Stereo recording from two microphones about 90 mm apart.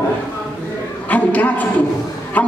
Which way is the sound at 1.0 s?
15° left (ahead or behind).